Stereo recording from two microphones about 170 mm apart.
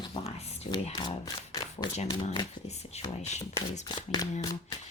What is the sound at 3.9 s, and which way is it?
Speech, 25° left (ahead or behind).